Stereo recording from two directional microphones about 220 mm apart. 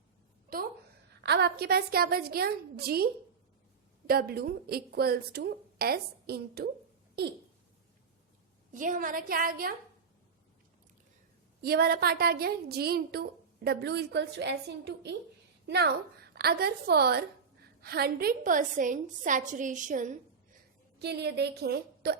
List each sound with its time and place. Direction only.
1.2 s speech: 50° right (ahead or behind)
8.7 s a woman's voice: 35° right (ahead or behind)
11.6 s a woman's voice: 45° right (ahead or behind)
21.0 s speech: 50° right (ahead or behind)